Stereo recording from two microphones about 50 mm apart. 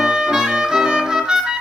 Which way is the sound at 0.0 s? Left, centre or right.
Centre.